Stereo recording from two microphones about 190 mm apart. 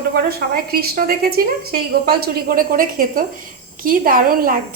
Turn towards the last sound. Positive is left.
turn(degrees=-50)  # may be behind; listen again after turning